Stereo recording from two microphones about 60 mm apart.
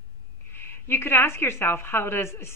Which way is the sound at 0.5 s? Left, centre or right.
Left.